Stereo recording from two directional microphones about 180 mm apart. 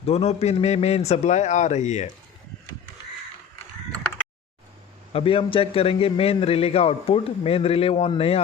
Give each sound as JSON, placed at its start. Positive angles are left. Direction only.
{"t": 0.0, "sound": "a man's voice", "side_deg": 35}
{"t": 5.1, "sound": "a man's voice", "side_deg": 30}